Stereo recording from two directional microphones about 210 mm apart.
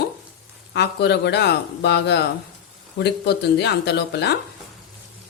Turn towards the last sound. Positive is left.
turn(degrees=55)  # may be behind; listen again after turning